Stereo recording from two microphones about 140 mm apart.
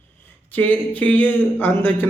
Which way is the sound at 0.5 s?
10° left (ahead or behind).